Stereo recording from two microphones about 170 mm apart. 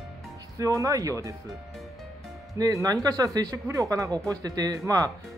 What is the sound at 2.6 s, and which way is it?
Speech, 20° right (ahead or behind).